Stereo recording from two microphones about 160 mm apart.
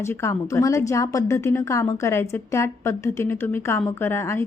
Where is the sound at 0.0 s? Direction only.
15° left (ahead or behind).